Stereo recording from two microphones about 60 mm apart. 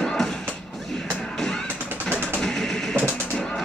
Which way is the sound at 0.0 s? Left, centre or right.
Centre.